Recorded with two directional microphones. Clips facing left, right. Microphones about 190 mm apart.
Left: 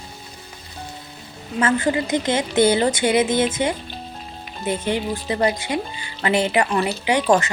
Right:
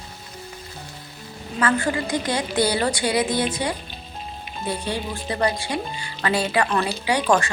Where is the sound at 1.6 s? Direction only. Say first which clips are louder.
Left 2 dB; 20° left (ahead or behind).